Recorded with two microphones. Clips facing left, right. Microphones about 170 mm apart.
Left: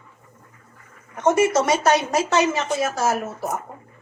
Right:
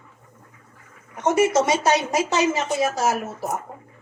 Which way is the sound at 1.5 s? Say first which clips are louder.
Left 1 dB; 20° right (ahead or behind).